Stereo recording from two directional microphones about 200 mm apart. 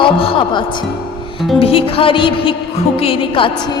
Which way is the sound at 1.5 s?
30° left (ahead or behind).